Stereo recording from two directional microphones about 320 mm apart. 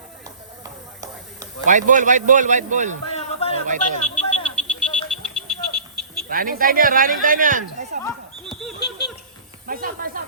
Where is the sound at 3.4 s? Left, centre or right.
Centre.